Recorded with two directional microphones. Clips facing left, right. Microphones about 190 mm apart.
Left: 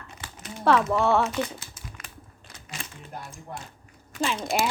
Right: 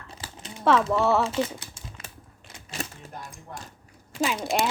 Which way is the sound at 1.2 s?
30° right (ahead or behind).